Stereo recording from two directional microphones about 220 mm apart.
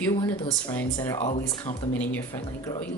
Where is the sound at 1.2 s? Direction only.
30° left (ahead or behind).